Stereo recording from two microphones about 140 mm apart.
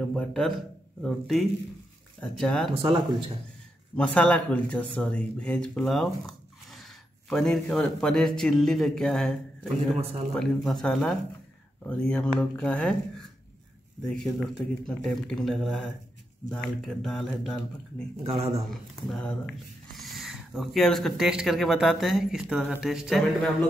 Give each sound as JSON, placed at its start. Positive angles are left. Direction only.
{"t": 0.0, "sound": "speech", "side_deg": 5}
{"t": 2.7, "sound": "speech", "side_deg": -40}
{"t": 3.9, "sound": "speech", "side_deg": 10}
{"t": 14.0, "sound": "speech", "side_deg": 5}
{"t": 18.2, "sound": "speech", "side_deg": -45}
{"t": 18.7, "sound": "speech", "side_deg": 5}